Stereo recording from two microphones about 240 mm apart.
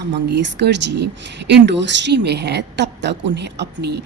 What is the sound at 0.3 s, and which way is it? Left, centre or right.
A woman's voice, right.